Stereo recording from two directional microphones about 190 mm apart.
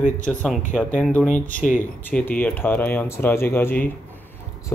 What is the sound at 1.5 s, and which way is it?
Speech, 40° left (ahead or behind).